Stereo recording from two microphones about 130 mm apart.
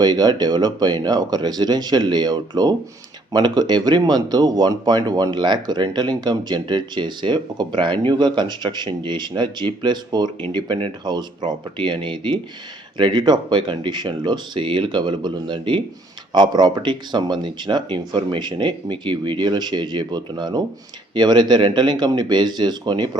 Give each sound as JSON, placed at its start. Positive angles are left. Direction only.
{"t": 0.0, "sound": "speech", "side_deg": -35}